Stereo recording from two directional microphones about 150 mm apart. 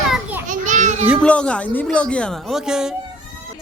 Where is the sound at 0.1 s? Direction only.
10° right (ahead or behind).